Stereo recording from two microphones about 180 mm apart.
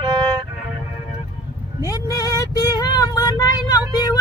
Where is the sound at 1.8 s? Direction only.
20° left (ahead or behind).